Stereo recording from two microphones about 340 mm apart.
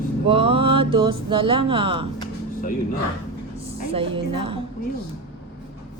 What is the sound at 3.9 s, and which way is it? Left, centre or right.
Mantra, centre.